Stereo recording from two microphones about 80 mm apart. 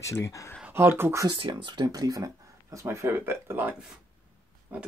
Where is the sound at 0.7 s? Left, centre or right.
Right.